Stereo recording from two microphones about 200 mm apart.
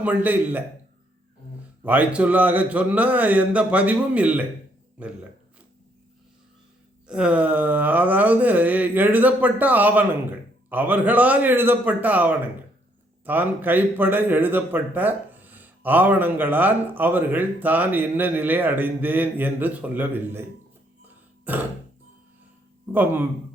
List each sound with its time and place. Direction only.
0.0 s speech: 10° right (ahead or behind)
1.8 s speech: 10° right (ahead or behind)
7.1 s speech: 5° right (ahead or behind)
21.4 s throat clearing: 10° right (ahead or behind)
22.9 s speech: 10° right (ahead or behind)